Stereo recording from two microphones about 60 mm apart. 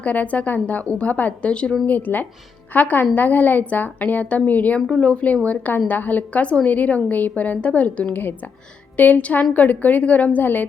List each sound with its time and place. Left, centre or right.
0.0 s a woman's voice: left
1.9 s a woman's voice: left